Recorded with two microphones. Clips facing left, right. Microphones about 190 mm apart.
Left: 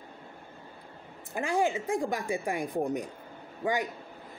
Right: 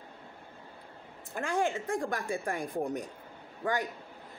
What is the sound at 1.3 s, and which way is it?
Speech, 10° left (ahead or behind).